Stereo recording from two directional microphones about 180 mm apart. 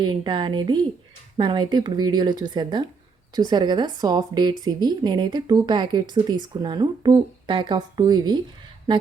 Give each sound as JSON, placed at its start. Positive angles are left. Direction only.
{"t": 0.0, "sound": "speech", "side_deg": -25}